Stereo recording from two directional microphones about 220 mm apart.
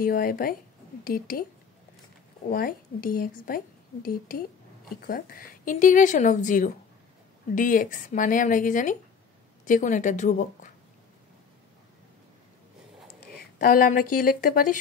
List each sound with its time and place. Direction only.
0.0 s speech: 40° left (ahead or behind)
2.5 s speech: 40° left (ahead or behind)
13.6 s speech: 40° left (ahead or behind)